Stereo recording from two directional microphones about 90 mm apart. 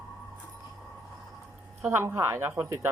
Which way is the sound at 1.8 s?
30° right (ahead or behind).